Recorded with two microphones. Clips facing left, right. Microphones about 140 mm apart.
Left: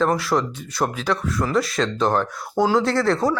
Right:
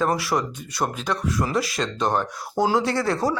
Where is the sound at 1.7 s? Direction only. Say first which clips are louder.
Left 3 dB; 5° right (ahead or behind).